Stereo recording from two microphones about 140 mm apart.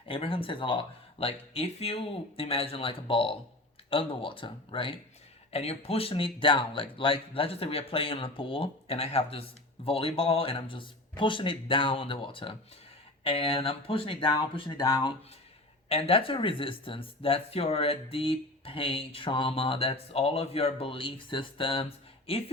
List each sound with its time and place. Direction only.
0.1 s speech: 40° left (ahead or behind)
15.9 s speech: 45° left (ahead or behind)